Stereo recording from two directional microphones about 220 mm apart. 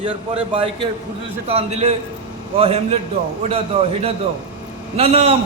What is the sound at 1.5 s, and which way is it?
Speech, 30° right (ahead or behind).